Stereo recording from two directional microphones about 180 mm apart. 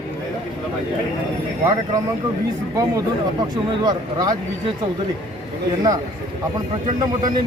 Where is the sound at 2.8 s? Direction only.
20° right (ahead or behind).